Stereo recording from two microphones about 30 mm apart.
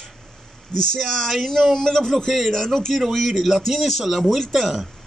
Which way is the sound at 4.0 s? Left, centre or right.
Centre.